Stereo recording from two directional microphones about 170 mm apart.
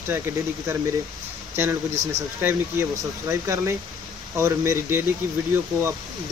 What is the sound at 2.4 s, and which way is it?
Speech, 10° right (ahead or behind).